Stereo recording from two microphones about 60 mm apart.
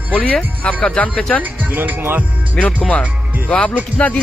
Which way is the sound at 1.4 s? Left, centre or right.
Right.